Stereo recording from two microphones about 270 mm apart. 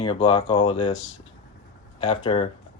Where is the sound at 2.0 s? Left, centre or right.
Centre.